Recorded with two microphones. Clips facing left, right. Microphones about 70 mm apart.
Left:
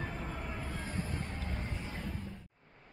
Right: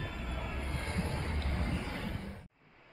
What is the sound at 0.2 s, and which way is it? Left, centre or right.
Train, centre.